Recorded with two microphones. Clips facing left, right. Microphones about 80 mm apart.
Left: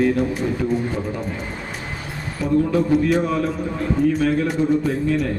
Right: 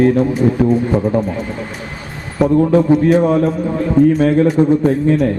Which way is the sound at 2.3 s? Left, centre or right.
Right.